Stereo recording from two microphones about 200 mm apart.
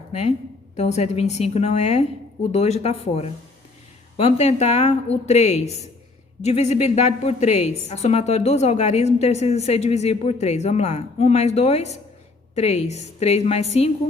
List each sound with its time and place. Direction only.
0.1 s a woman's voice: 35° left (ahead or behind)